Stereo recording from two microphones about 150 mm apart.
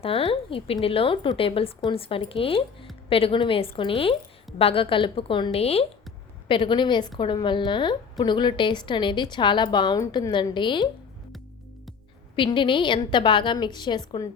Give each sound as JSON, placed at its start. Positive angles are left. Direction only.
{"t": 0.0, "sound": "a woman's voice", "side_deg": 40}
{"t": 12.4, "sound": "a woman's voice", "side_deg": 35}